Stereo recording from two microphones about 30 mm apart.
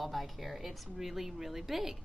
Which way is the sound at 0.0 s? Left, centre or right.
Centre.